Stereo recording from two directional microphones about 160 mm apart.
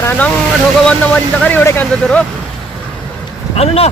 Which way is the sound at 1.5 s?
10° left (ahead or behind).